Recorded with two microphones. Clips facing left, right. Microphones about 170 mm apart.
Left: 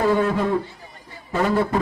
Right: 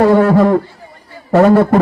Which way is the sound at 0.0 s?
75° right (ahead or behind).